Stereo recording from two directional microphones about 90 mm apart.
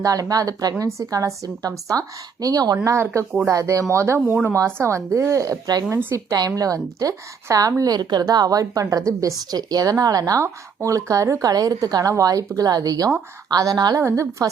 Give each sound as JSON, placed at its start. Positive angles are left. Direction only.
{"t": 0.0, "sound": "a woman's voice", "side_deg": -40}
{"t": 2.8, "sound": "a woman's voice", "side_deg": -30}
{"t": 14.0, "sound": "a woman's voice", "side_deg": -35}